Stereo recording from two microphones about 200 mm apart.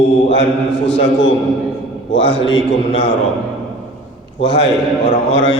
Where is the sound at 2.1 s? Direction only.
65° left (ahead or behind).